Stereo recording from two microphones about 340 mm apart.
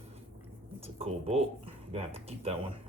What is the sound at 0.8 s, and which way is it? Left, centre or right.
Speech, centre.